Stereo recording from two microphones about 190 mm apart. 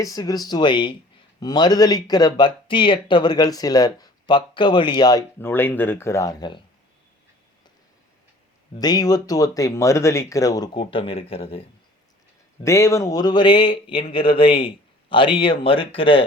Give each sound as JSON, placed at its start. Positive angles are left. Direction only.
{"t": 0.0, "sound": "speech", "side_deg": 20}
{"t": 8.7, "sound": "speech", "side_deg": 20}
{"t": 12.6, "sound": "speech", "side_deg": 15}